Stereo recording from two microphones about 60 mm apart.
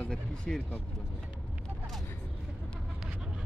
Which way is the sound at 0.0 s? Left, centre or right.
Centre.